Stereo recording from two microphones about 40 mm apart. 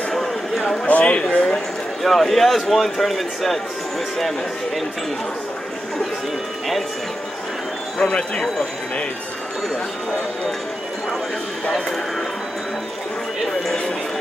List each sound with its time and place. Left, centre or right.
0.1 s a sound: centre
0.8 s speech: left
2.0 s speech: centre
8.1 s speech: left